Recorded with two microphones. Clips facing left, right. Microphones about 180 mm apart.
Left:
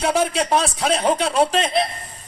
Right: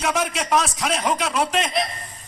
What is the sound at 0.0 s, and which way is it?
A man's voice, 30° left (ahead or behind).